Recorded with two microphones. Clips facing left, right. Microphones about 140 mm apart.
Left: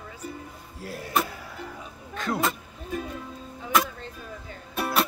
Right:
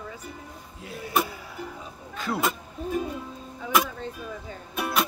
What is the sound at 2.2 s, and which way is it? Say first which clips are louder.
Speech: even; 10° right (ahead or behind).